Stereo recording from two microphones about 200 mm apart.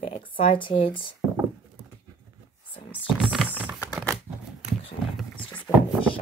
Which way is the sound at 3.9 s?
Centre (ahead or behind).